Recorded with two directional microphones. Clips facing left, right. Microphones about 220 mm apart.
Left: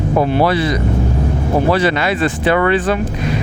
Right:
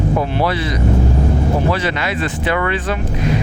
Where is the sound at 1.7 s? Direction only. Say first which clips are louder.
Left 5 dB; 35° left (ahead or behind).